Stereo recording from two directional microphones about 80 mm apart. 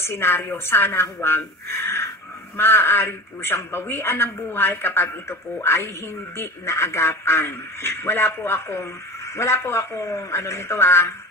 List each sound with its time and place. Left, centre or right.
0.0 s a man's voice: left